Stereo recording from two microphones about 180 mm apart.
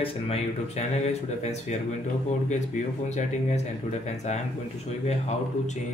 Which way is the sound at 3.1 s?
40° left (ahead or behind).